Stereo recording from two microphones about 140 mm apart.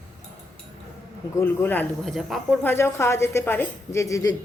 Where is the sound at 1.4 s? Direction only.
15° left (ahead or behind).